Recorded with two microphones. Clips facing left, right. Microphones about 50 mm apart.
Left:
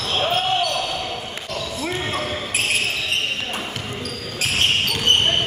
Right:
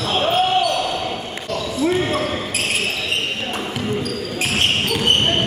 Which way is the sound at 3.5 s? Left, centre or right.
Centre.